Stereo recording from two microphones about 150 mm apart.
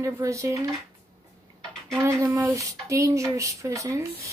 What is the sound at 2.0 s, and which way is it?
Speech, 20° right (ahead or behind).